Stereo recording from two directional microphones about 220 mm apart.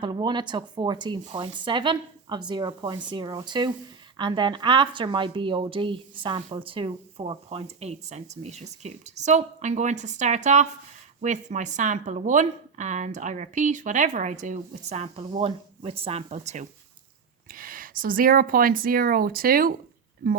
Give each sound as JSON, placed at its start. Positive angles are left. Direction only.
{"t": 0.0, "sound": "a woman's voice", "side_deg": -20}
{"t": 17.5, "sound": "a woman's voice", "side_deg": -40}